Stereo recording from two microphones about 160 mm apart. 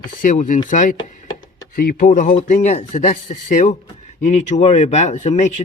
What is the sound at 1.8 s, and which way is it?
Speech, 65° left (ahead or behind).